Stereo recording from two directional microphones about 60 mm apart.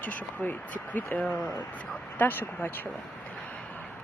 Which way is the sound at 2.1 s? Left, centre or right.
Left.